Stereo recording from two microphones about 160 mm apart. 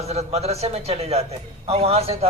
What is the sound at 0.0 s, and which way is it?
A man's voice, 40° right (ahead or behind).